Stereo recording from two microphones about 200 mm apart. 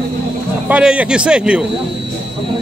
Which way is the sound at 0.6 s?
5° right (ahead or behind).